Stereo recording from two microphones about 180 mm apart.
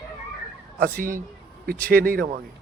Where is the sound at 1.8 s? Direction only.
55° right (ahead or behind).